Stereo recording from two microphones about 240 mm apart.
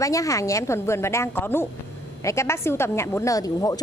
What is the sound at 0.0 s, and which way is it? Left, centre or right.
A woman's voice, centre.